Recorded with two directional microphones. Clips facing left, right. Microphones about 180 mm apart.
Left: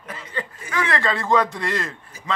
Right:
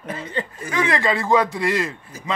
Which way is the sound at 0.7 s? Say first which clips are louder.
Right 2 dB; 15° right (ahead or behind).